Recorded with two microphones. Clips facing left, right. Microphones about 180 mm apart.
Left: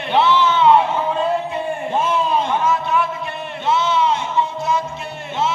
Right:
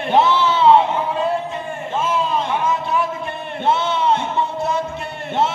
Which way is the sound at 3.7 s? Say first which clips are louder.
Even; 55° right (ahead or behind).